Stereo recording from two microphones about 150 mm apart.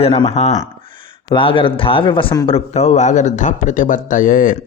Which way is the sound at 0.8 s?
60° right (ahead or behind).